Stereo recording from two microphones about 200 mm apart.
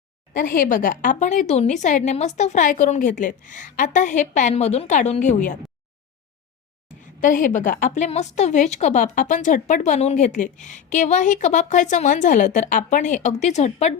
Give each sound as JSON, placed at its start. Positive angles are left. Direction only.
{"t": 0.3, "sound": "a woman's voice", "side_deg": 45}
{"t": 6.8, "sound": "a woman's voice", "side_deg": 40}